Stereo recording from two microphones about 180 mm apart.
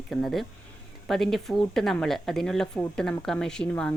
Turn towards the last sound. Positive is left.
turn(degrees=5)  # may be behind; listen again after turning